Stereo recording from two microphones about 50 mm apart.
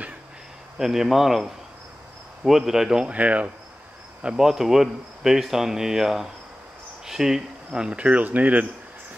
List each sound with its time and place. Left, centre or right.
0.7 s speech: centre
3.1 s speech: right
4.4 s speech: centre; by 8.6 s right